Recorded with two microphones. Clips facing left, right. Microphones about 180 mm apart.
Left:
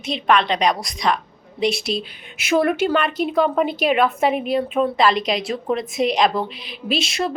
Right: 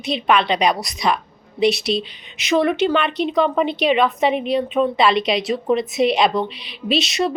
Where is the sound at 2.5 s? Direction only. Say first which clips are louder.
Right 1 dB; centre (ahead or behind).